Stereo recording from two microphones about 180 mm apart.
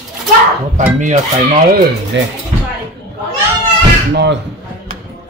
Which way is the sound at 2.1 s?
85° right.